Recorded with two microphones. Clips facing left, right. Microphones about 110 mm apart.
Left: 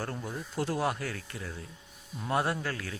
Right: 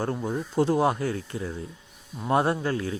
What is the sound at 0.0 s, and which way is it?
A man's voice, 25° right (ahead or behind).